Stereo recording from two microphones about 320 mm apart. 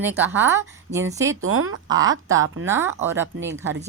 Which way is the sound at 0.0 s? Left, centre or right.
Centre.